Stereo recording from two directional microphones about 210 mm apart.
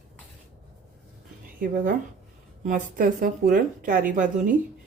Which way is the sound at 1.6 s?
40° right (ahead or behind).